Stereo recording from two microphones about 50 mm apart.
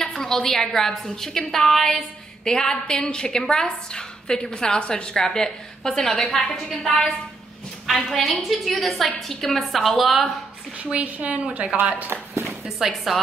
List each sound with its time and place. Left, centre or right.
0.0 s a woman's voice: centre
7.8 s a woman's voice: centre
10.8 s a woman's voice: right
12.4 s a sound: centre